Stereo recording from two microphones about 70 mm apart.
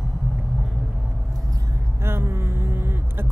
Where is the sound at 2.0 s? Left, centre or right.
Right.